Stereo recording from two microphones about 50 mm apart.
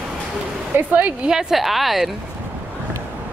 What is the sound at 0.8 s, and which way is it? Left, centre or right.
Speech, right.